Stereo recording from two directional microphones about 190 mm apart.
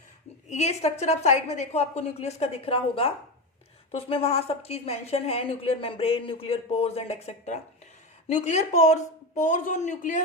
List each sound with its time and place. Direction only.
0.4 s a woman's voice: 35° left (ahead or behind)